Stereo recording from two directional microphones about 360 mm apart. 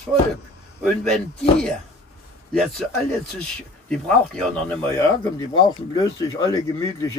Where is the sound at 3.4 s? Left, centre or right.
Centre.